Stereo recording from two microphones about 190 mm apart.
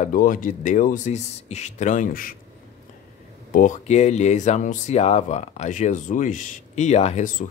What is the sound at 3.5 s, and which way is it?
Speech, 45° left (ahead or behind).